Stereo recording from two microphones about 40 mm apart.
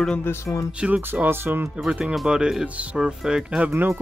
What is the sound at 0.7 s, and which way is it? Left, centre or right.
Speech, right.